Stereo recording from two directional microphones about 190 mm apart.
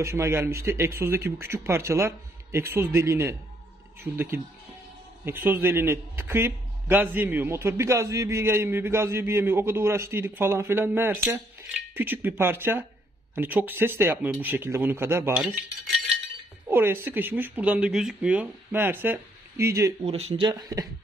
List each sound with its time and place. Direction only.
0.0 s a man's voice: 15° right (ahead or behind)
16.6 s a man's voice: 10° right (ahead or behind)
20.0 s speech: 30° right (ahead or behind)